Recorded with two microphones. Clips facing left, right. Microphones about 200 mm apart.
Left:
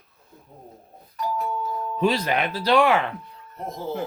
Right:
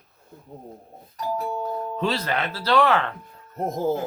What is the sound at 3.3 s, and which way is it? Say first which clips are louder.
Speech: right 6 dB; 45° right (ahead or behind).